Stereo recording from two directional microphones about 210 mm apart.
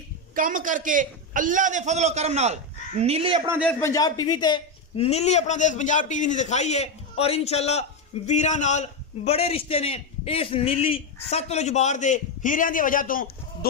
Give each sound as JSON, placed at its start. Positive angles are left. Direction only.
{"t": 0.4, "sound": "a man's voice", "side_deg": -40}
{"t": 3.6, "sound": "a man's voice", "side_deg": 15}